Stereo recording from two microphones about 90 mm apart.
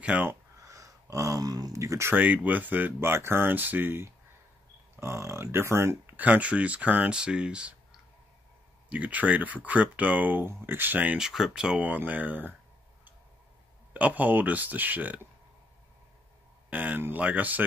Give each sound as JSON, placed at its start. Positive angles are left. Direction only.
{"t": 0.0, "sound": "speech", "side_deg": -15}
{"t": 0.7, "sound": "speech", "side_deg": -40}
{"t": 2.1, "sound": "speech", "side_deg": -20}
{"t": 6.1, "sound": "speech", "side_deg": -15}
{"t": 8.8, "sound": "speech", "side_deg": -15}
{"t": 11.1, "sound": "speech", "side_deg": -5}
{"t": 13.9, "sound": "speech", "side_deg": -20}
{"t": 16.7, "sound": "speech", "side_deg": -20}